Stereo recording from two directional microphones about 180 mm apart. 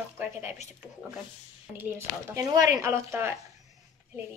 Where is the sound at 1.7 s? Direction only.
15° right (ahead or behind).